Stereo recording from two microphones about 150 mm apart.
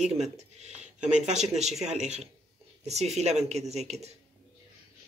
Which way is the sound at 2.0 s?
45° right (ahead or behind).